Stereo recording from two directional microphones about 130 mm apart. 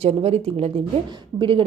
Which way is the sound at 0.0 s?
50° right (ahead or behind).